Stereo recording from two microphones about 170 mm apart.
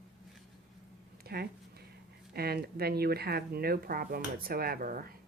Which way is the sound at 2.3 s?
65° right (ahead or behind).